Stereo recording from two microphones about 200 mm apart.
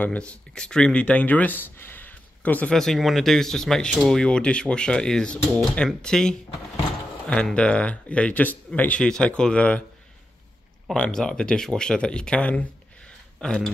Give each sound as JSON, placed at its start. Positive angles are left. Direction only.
{"t": 0.0, "sound": "speech", "side_deg": 5}
{"t": 10.9, "sound": "speech", "side_deg": 5}